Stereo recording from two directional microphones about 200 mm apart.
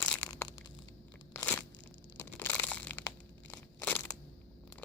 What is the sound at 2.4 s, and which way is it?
Crushing, 10° left (ahead or behind).